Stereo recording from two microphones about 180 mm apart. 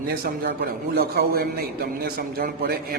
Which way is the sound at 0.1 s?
60° right (ahead or behind).